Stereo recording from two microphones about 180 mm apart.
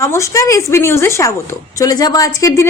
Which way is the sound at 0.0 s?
15° left (ahead or behind).